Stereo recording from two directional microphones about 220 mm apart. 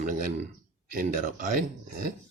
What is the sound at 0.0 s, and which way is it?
Speech, 35° right (ahead or behind).